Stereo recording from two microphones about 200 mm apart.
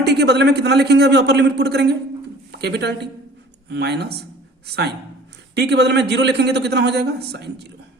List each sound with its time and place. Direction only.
0.0 s a man's voice: 55° right (ahead or behind)